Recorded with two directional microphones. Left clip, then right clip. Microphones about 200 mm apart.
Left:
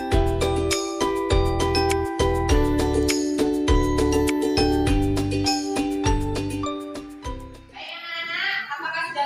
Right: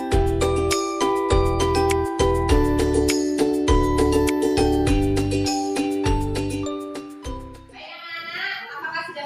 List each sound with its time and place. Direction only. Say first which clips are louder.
0.0 s music: right 1 dB; centre (ahead or behind)